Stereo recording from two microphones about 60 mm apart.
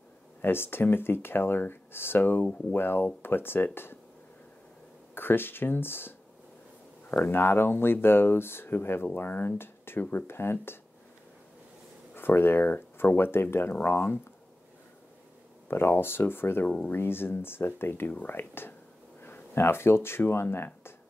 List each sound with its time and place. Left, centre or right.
0.4 s speech: left
5.1 s speech: left
7.2 s speech: left
12.1 s speech: left
15.7 s speech: left
16.6 s speech: left
16.9 s speech: left